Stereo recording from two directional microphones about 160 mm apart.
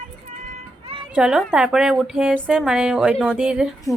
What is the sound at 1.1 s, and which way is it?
A woman's voice, 5° right (ahead or behind).